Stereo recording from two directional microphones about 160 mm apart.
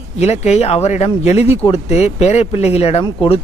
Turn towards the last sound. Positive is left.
turn(degrees=35)  # may be behind; listen again after turning